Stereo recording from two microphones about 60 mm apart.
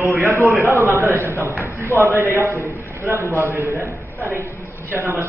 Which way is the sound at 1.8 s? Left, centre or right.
Right.